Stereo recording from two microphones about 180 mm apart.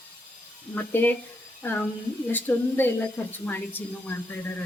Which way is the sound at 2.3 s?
10° left (ahead or behind).